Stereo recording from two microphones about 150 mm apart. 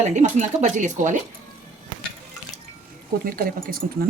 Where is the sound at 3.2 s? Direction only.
75° right (ahead or behind).